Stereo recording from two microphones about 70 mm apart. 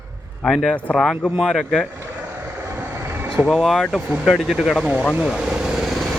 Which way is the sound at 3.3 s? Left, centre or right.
Centre.